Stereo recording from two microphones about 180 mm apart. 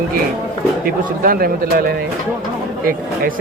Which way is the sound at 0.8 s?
55° right (ahead or behind).